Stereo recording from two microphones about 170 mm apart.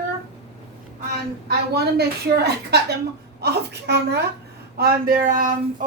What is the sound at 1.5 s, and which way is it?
A woman's voice, 70° right (ahead or behind).